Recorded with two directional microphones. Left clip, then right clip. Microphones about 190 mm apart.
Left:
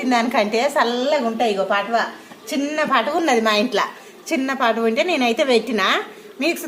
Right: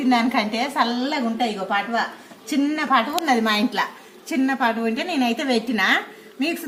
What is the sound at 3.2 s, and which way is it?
A woman's voice, 35° left (ahead or behind).